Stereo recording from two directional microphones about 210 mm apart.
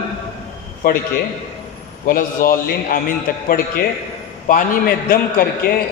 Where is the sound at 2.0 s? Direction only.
40° left (ahead or behind).